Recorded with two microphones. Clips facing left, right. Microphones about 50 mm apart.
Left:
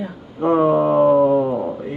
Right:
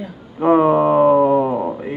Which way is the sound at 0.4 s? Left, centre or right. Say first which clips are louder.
Right 2 dB; right.